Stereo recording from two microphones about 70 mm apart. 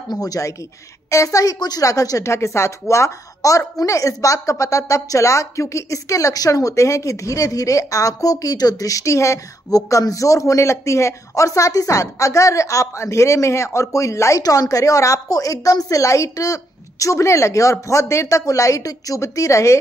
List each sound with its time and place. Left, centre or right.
0.1 s a woman's voice: left